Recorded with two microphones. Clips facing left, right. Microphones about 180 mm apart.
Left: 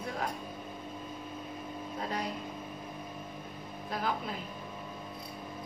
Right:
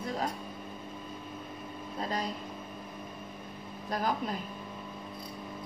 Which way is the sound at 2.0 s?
35° right (ahead or behind).